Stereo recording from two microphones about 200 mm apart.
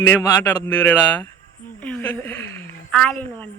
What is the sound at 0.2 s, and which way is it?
A woman's voice, 10° left (ahead or behind).